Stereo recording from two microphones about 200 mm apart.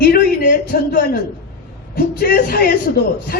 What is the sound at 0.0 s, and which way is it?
A man's voice, 50° left (ahead or behind).